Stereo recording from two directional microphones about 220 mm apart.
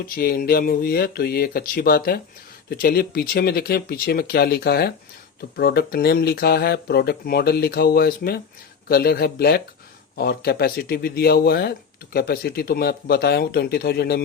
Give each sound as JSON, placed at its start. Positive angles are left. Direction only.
{"t": 0.2, "sound": "speech", "side_deg": 40}